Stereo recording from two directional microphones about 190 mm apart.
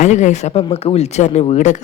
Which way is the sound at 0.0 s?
40° left (ahead or behind).